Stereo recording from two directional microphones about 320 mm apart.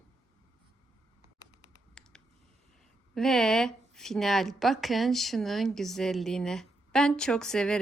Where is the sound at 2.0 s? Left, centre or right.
Centre.